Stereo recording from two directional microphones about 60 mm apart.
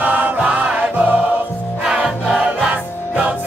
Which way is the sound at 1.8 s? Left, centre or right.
Centre.